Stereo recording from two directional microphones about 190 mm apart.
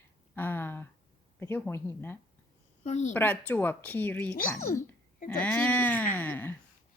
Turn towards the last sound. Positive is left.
turn(degrees=10)  # may be behind; listen again after turning